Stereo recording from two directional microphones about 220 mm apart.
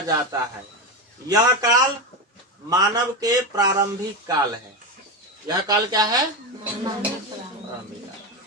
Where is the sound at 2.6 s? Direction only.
15° right (ahead or behind).